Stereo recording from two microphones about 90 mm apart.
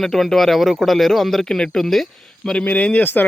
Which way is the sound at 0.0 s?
5° left (ahead or behind).